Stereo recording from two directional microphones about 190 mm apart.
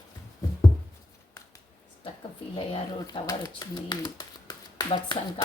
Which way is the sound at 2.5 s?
30° left (ahead or behind).